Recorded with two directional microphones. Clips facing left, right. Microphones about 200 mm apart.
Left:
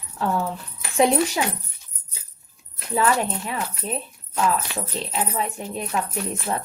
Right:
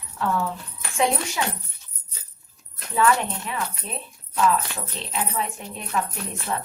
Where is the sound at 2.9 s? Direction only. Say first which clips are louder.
Even; 35° left (ahead or behind).